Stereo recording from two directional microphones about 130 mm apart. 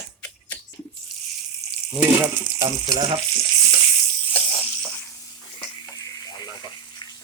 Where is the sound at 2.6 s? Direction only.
40° right (ahead or behind).